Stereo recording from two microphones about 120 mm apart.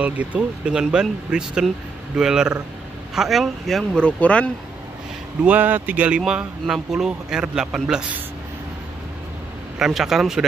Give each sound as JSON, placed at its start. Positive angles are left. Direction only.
{"t": 0.0, "sound": "speech", "side_deg": -10}
{"t": 5.4, "sound": "speech", "side_deg": -15}
{"t": 9.8, "sound": "speech", "side_deg": -5}